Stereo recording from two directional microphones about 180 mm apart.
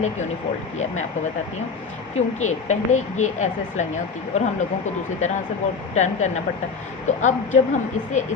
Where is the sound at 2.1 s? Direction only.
40° left (ahead or behind).